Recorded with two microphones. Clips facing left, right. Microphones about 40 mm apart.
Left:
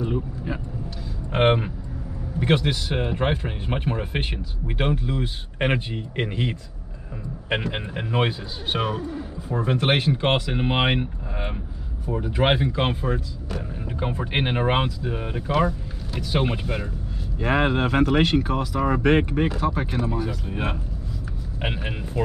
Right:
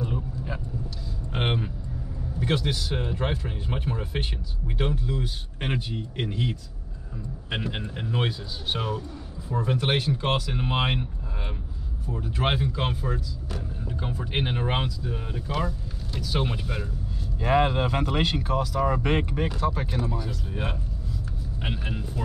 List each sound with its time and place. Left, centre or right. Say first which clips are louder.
0.0 s vehicle: left 5 dB; centre
1.3 s speech: left 8 dB; left
7.7 s speech: left 4 dB; left; by 20.1 s centre
21.5 s speech: left 4 dB; left